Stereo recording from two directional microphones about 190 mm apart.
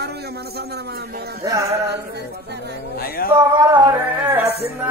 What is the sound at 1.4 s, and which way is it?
Music, 15° right (ahead or behind).